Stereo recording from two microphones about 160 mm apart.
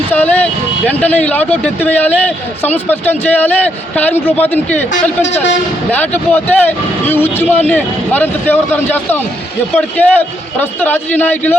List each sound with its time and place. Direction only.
0.1 s speech: 10° left (ahead or behind)
5.2 s speech: 45° left (ahead or behind)
5.9 s speech: 10° left (ahead or behind)